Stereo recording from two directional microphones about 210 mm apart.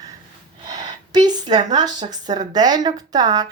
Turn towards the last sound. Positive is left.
turn(degrees=-20)  # may be behind; listen again after turning